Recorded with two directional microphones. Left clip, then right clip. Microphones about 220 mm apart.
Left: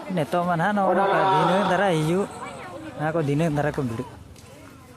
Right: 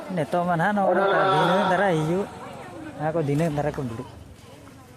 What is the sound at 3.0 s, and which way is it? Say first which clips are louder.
Speech: even; 10° left (ahead or behind).